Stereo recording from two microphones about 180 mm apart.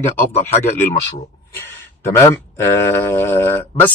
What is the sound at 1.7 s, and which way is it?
Speech, 15° left (ahead or behind).